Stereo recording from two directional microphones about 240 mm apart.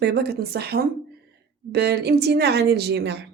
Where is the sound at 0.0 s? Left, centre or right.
Right.